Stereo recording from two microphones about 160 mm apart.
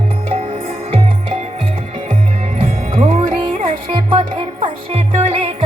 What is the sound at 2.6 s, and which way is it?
Music, 35° right (ahead or behind).